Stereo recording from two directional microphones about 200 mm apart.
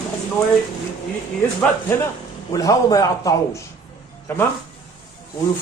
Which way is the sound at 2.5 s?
15° left (ahead or behind).